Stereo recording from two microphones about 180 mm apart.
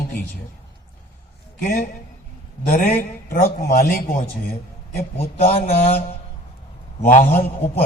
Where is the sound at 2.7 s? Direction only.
40° left (ahead or behind).